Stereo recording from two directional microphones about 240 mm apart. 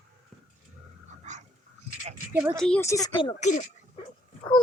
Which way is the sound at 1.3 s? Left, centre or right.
Right.